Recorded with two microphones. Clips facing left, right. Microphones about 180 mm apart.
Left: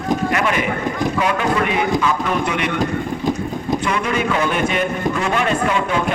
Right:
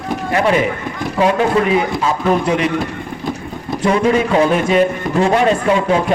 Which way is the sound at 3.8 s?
30° right (ahead or behind).